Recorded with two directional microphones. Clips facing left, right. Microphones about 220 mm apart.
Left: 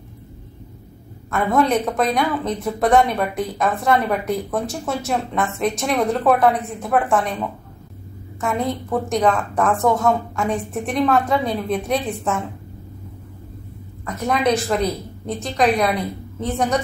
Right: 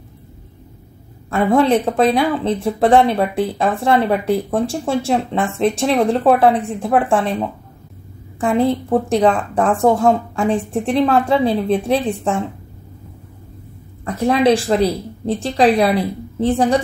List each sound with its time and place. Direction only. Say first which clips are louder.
1.3 s speech: right 4 dB; 30° right (ahead or behind)
14.0 s a woman's voice: right 6 dB; 30° right (ahead or behind)